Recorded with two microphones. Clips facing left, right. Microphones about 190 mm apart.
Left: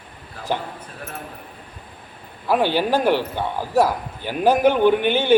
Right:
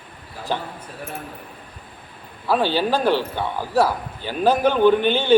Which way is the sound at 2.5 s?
15° left (ahead or behind).